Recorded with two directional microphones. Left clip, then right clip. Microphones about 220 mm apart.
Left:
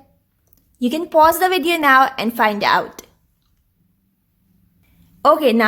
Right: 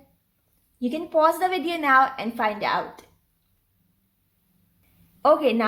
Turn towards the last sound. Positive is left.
turn(degrees=35)  # may be behind; listen again after turning